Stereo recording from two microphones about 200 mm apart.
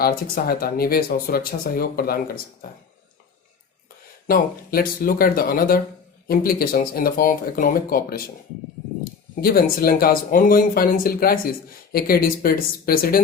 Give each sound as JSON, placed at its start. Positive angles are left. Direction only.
{"t": 0.0, "sound": "speech", "side_deg": 50}
{"t": 4.3, "sound": "speech", "side_deg": 45}
{"t": 9.4, "sound": "speech", "side_deg": 50}